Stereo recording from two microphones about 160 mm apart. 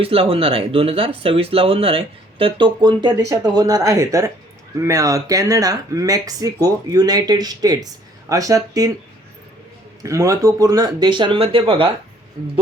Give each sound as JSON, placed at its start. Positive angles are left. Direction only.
{"t": 0.0, "sound": "speech", "side_deg": -35}
{"t": 10.0, "sound": "speech", "side_deg": -20}